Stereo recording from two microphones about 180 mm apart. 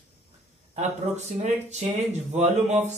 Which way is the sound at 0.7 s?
40° right (ahead or behind).